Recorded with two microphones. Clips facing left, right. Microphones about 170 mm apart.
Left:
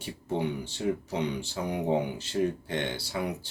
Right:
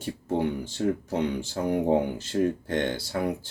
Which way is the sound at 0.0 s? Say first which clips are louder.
Right 4 dB; 50° right (ahead or behind).